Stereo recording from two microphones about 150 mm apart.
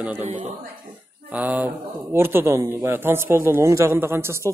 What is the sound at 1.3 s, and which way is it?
A man's voice, 10° right (ahead or behind).